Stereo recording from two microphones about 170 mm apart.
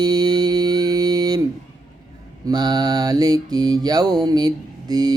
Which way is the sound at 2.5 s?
25° right (ahead or behind).